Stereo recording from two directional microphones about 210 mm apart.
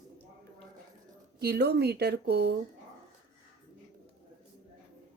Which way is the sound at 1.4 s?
50° right (ahead or behind).